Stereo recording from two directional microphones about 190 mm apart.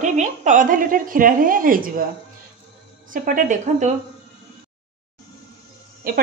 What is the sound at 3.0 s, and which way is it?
Speech, 45° right (ahead or behind).